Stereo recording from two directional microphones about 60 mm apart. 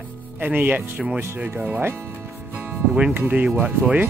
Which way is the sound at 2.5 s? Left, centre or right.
Right.